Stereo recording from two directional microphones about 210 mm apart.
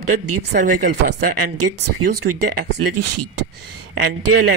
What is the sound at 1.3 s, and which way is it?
Speech, 50° right (ahead or behind).